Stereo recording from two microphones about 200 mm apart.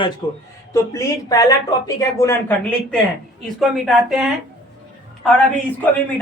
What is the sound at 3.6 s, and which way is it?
Speech, centre (ahead or behind).